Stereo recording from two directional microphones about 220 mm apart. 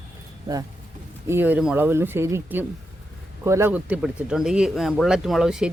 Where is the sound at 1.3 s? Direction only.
10° right (ahead or behind).